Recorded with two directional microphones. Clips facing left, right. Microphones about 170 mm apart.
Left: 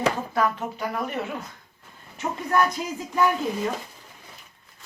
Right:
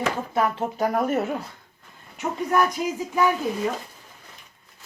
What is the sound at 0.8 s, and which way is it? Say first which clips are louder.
Speech: right 9 dB; 45° right (ahead or behind).